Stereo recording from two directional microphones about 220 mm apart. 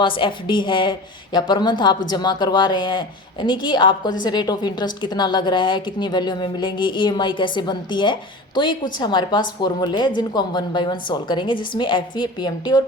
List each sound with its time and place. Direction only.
0.0 s a woman's voice: 20° left (ahead or behind)